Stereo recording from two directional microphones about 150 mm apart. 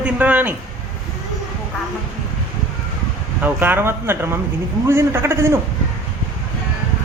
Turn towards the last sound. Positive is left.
turn(degrees=-15)  # may be behind; listen again after turning